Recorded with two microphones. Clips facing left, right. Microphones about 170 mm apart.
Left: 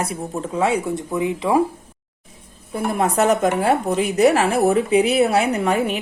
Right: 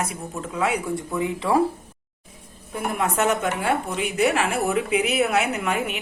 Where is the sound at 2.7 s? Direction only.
35° left (ahead or behind).